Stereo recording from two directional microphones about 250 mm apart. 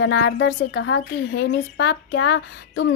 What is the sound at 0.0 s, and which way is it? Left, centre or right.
Speech, left.